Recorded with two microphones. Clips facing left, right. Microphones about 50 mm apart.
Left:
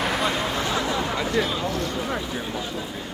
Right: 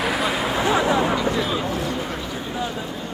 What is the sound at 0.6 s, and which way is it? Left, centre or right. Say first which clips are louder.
Speech: right 6 dB; centre.